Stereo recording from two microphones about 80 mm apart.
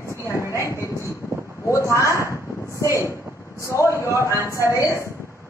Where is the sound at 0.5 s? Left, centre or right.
Left.